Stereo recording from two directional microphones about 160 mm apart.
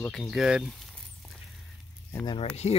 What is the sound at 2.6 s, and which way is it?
Speech, 40° left (ahead or behind).